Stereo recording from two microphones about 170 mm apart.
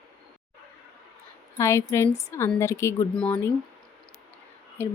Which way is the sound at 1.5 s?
15° left (ahead or behind).